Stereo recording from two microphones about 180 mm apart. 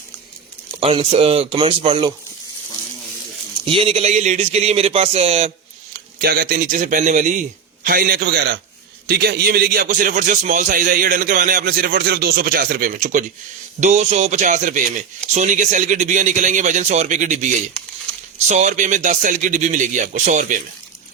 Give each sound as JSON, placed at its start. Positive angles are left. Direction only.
{"t": 0.8, "sound": "speech", "side_deg": -30}
{"t": 3.7, "sound": "speech", "side_deg": -30}
{"t": 5.9, "sound": "speech", "side_deg": -55}
{"t": 7.9, "sound": "a man's voice", "side_deg": -55}